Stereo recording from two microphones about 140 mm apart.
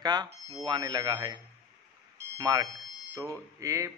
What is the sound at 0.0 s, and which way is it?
Speech, 30° right (ahead or behind).